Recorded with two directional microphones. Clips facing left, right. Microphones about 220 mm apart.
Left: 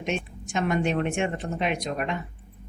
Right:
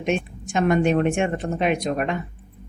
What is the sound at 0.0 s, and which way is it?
A woman's voice, 50° right (ahead or behind).